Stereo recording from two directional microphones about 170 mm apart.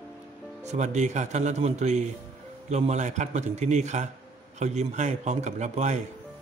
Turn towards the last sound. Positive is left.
turn(degrees=-40)  # may be behind; listen again after turning